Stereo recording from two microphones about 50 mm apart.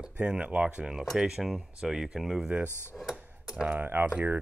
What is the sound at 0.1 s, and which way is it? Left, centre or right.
Speech, right.